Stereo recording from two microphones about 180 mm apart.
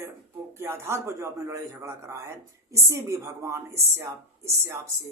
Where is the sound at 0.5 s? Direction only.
15° right (ahead or behind).